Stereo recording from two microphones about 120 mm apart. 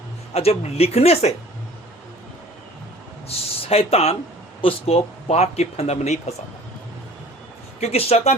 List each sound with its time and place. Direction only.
0.3 s speech: 55° left (ahead or behind)
3.2 s a sound: 55° left (ahead or behind)
4.6 s speech: 60° left (ahead or behind)
7.8 s speech: 60° left (ahead or behind)